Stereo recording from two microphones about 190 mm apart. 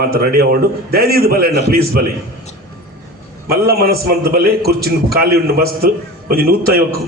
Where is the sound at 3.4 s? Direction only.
55° right (ahead or behind).